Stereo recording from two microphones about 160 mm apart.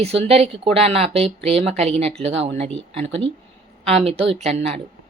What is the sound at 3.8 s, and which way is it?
Speech, 40° right (ahead or behind).